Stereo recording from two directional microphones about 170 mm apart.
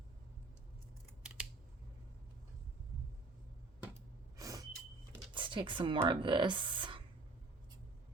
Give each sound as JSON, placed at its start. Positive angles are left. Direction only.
{"t": 4.4, "sound": "vehicle", "side_deg": -20}
{"t": 5.3, "sound": "a sound", "side_deg": -30}
{"t": 6.1, "sound": "speech", "side_deg": -30}